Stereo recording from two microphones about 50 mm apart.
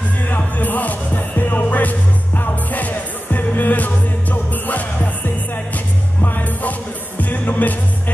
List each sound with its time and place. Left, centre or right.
0.3 s music: left